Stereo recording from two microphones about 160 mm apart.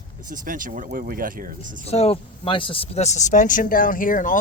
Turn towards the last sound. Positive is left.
turn(degrees=55)  # may be behind; listen again after turning